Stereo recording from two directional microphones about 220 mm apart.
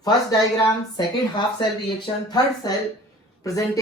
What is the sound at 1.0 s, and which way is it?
A woman's voice, 20° left (ahead or behind).